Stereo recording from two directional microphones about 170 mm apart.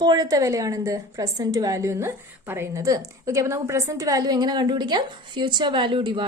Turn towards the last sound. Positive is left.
turn(degrees=-30)  # may be behind; listen again after turning